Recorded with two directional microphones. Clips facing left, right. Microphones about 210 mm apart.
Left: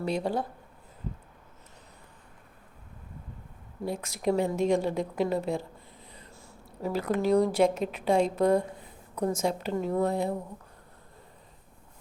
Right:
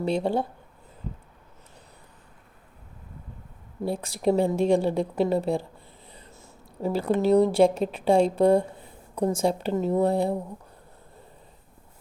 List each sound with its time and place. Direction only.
0.0 s speech: 25° right (ahead or behind)
3.8 s a woman's voice: 30° right (ahead or behind)